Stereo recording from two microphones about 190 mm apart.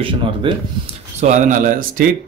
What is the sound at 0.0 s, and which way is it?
Speech, 25° right (ahead or behind).